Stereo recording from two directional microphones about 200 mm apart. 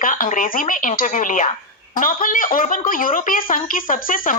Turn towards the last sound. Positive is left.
turn(degrees=40)  # may be behind; listen again after turning